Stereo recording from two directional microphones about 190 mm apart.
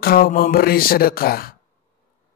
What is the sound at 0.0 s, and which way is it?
Speech, 50° left (ahead or behind).